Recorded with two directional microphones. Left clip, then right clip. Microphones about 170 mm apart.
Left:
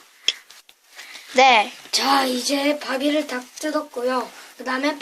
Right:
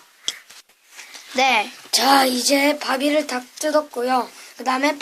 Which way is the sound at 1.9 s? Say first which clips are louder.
Right 4 dB; 30° right (ahead or behind).